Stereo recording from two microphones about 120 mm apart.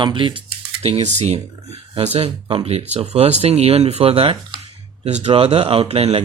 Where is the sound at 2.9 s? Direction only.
65° right (ahead or behind).